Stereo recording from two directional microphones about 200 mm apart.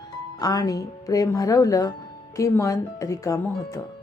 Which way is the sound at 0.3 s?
20° left (ahead or behind).